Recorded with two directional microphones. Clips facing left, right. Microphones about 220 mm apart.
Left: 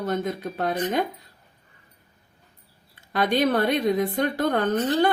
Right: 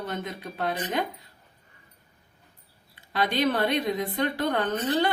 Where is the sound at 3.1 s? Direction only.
50° left (ahead or behind).